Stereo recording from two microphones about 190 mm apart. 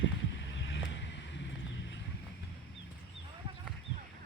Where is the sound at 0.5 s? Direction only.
70° left (ahead or behind).